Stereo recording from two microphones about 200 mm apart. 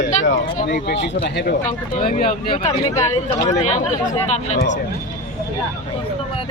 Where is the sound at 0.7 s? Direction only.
55° left (ahead or behind).